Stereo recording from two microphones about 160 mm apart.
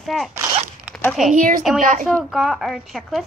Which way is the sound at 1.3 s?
55° right (ahead or behind).